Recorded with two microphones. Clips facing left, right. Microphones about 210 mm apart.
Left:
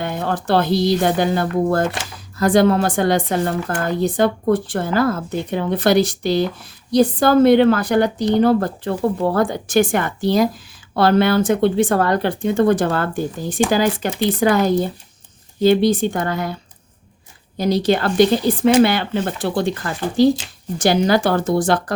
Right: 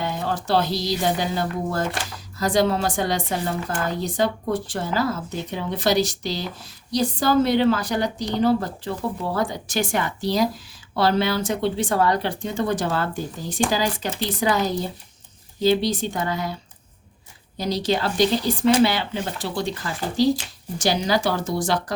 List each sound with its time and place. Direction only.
0.0 s a woman's voice: 55° left (ahead or behind)
17.6 s a woman's voice: 55° left (ahead or behind)